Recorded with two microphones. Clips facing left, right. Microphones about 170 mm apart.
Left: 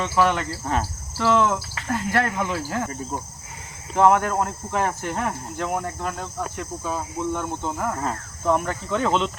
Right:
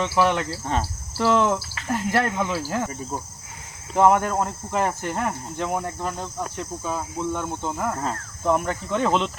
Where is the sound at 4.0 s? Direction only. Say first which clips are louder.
Even; 5° right (ahead or behind).